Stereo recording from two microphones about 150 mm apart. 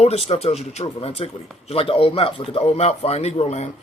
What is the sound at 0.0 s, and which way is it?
Speech, 45° left (ahead or behind).